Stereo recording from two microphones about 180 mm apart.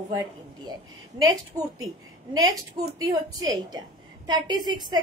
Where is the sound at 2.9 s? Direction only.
20° right (ahead or behind).